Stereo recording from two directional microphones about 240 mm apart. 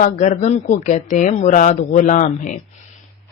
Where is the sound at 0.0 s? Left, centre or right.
Left.